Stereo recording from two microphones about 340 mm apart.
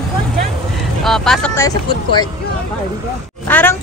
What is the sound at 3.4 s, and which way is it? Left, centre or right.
Oink, centre.